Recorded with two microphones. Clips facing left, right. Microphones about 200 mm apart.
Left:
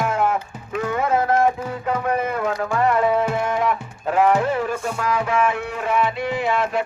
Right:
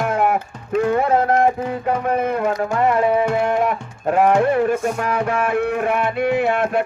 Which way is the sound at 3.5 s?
50° right (ahead or behind).